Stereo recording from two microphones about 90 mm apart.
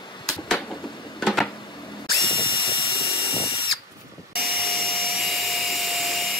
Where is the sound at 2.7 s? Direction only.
60° left (ahead or behind).